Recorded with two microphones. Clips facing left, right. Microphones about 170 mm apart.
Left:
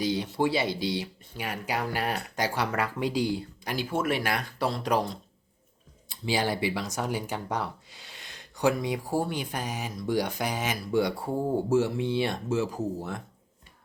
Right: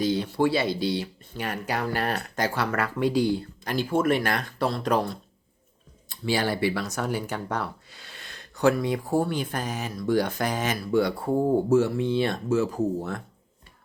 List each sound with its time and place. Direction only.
0.0 s speech: 15° left (ahead or behind)